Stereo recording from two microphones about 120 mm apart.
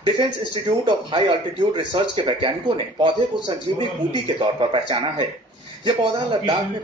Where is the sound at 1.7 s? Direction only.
45° right (ahead or behind).